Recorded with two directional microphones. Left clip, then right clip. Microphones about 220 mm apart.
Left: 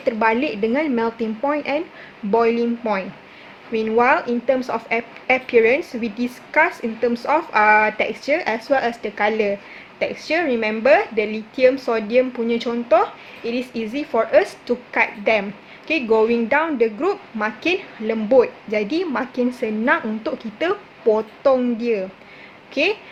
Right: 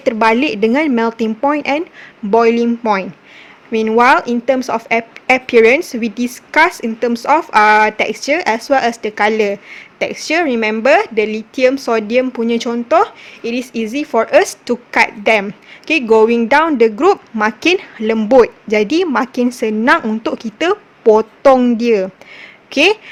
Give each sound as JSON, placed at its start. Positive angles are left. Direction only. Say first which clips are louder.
{"t": 0.0, "sound": "a woman's voice", "louder": "right 6 dB", "side_deg": -45}